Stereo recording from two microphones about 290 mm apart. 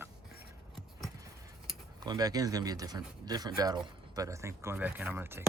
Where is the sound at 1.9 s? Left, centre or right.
Centre.